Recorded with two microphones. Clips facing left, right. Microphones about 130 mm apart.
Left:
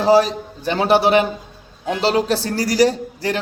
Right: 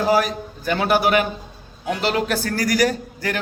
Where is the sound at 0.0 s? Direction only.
30° left (ahead or behind).